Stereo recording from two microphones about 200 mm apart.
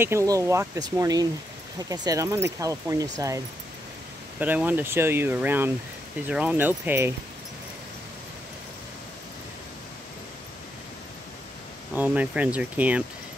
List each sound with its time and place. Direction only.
0.0 s speech: 15° right (ahead or behind)
11.9 s speech: 5° right (ahead or behind)